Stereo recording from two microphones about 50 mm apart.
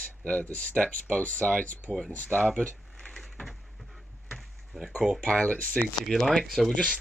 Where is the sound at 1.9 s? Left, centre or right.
Right.